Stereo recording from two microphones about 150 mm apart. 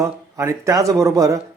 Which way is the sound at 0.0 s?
20° right (ahead or behind).